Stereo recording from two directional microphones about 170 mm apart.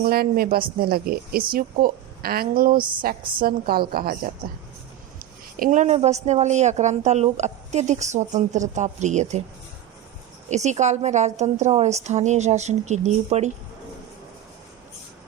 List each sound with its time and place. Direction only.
0.0 s a woman's voice: 60° right (ahead or behind); by 9.4 s 45° right (ahead or behind)
10.5 s a woman's voice: 45° right (ahead or behind)